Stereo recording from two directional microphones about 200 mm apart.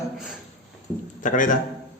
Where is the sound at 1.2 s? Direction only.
40° left (ahead or behind).